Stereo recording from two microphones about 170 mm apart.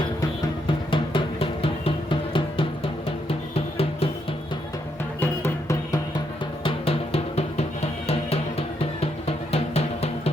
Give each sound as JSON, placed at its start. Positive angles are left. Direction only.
{"t": 0.9, "sound": "music", "side_deg": 30}
{"t": 5.2, "sound": "music", "side_deg": 15}
{"t": 6.7, "sound": "music", "side_deg": 35}